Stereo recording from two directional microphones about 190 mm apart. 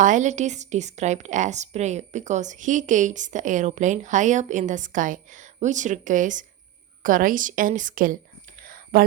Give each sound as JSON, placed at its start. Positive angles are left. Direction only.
{"t": 0.0, "sound": "a woman's voice", "side_deg": -40}
{"t": 8.6, "sound": "whispering", "side_deg": -50}